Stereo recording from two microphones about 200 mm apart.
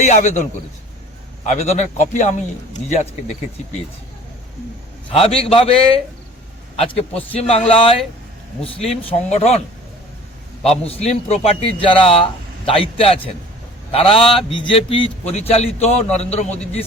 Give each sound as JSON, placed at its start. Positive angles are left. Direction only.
{"t": 0.0, "sound": "a man's voice", "side_deg": 35}
{"t": 1.5, "sound": "a man's voice", "side_deg": 35}
{"t": 5.1, "sound": "a man's voice", "side_deg": 30}
{"t": 6.7, "sound": "a man's voice", "side_deg": 30}